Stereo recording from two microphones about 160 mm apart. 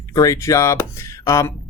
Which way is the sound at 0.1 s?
20° left (ahead or behind).